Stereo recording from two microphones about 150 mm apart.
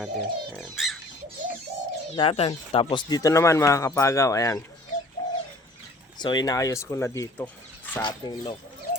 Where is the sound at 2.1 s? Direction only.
40° left (ahead or behind); by 4.6 s 20° left (ahead or behind).